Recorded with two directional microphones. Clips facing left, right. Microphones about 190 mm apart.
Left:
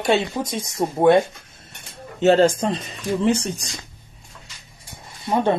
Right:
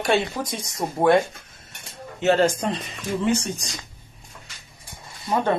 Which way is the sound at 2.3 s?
30° left (ahead or behind).